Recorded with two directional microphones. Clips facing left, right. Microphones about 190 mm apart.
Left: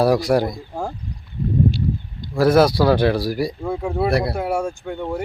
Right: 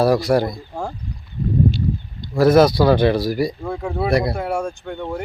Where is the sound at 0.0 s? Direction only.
15° left (ahead or behind).